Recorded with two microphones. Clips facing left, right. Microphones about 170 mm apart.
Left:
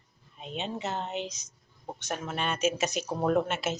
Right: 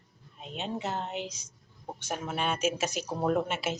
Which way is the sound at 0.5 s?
10° right (ahead or behind).